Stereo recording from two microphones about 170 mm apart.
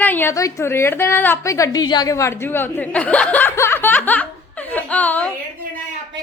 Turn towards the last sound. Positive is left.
turn(degrees=10)  # may be behind; listen again after turning